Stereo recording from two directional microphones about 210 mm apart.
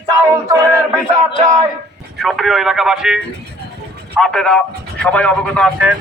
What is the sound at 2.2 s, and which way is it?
A man's voice, centre (ahead or behind).